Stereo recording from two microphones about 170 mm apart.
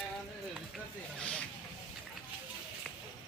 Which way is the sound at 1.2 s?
5° left (ahead or behind).